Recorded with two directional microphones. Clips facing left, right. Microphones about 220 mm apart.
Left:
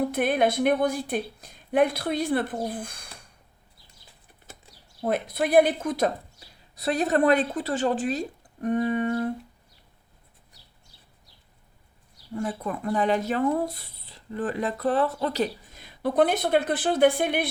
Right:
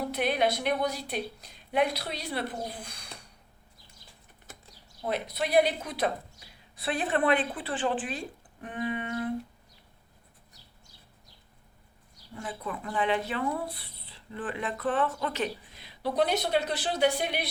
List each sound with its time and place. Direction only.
0.0 s speech: 50° left (ahead or behind)
5.0 s a woman's voice: 50° left (ahead or behind)
12.4 s speech: 45° left (ahead or behind)